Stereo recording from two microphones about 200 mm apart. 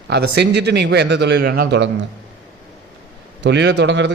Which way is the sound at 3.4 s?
65° right (ahead or behind).